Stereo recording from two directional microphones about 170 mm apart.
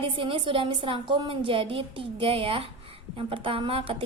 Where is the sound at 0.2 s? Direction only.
30° right (ahead or behind).